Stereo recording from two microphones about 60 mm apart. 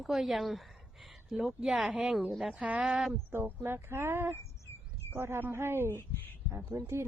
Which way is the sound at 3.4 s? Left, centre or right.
Right.